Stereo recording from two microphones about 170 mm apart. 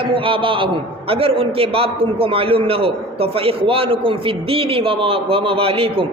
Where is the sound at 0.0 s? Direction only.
30° right (ahead or behind).